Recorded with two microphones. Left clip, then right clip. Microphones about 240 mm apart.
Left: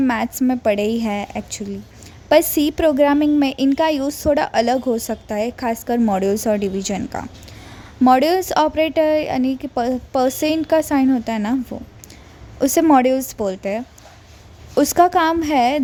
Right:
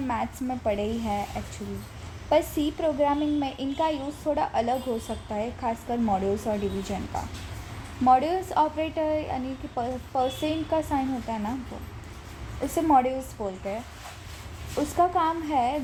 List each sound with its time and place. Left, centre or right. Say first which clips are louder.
0.0 s a woman's voice: left 10 dB; left
8.0 s a woman's voice: left 7 dB; left
12.6 s a woman's voice: left 8 dB; left
14.8 s a woman's voice: left 9 dB; left